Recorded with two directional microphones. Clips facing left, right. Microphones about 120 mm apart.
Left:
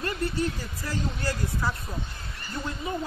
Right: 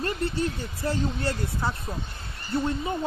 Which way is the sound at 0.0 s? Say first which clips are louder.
Right 1 dB; 25° right (ahead or behind).